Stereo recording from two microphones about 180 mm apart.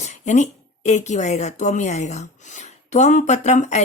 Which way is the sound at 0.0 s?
40° left (ahead or behind).